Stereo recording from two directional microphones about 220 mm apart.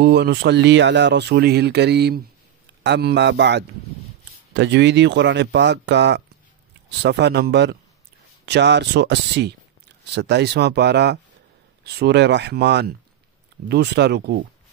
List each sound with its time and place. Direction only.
0.0 s speech: 50° right (ahead or behind)